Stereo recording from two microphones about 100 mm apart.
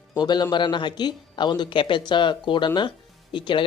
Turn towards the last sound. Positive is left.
turn(degrees=55)  # may be behind; listen again after turning